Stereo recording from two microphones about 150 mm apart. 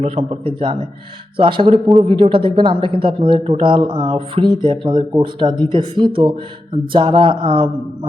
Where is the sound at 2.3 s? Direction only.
35° right (ahead or behind).